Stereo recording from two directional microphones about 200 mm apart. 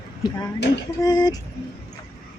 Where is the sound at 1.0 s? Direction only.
20° left (ahead or behind).